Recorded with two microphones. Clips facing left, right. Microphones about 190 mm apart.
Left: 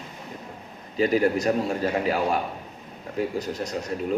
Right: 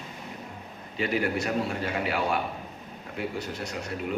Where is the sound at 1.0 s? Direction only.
40° left (ahead or behind).